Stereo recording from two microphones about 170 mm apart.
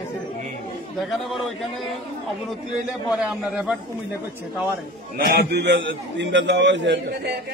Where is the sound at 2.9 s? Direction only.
5° right (ahead or behind).